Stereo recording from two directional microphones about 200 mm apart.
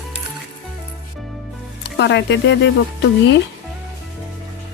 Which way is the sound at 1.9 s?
60° left (ahead or behind).